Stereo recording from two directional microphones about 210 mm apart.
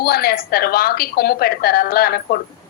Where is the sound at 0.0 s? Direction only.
45° left (ahead or behind).